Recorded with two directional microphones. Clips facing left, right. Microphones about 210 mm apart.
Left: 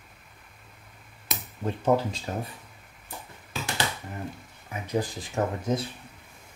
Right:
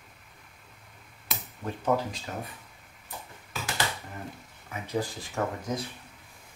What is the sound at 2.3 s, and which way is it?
Speech, 30° left (ahead or behind).